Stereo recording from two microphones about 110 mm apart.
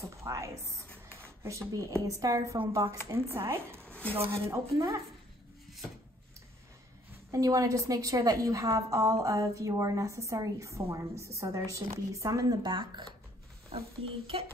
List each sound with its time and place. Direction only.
0.0 s a woman's voice: 30° right (ahead or behind)
7.2 s a woman's voice: 30° right (ahead or behind)
13.7 s speech: 60° right (ahead or behind)